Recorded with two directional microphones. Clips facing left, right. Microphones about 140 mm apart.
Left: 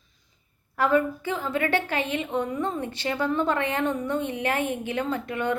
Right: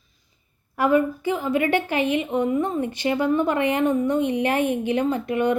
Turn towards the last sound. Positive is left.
turn(degrees=-20)  # may be behind; listen again after turning